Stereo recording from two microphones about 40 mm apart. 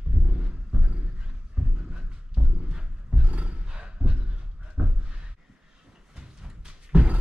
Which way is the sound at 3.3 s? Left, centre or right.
Right.